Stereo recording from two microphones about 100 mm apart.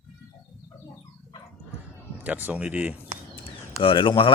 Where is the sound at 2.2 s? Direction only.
15° right (ahead or behind).